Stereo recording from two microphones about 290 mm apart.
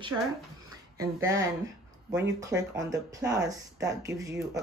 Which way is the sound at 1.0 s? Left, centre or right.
Centre.